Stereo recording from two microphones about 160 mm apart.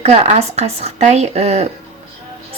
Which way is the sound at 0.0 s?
40° right (ahead or behind).